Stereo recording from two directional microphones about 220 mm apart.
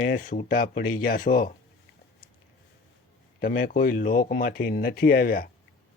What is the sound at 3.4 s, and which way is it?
Speech, 40° left (ahead or behind).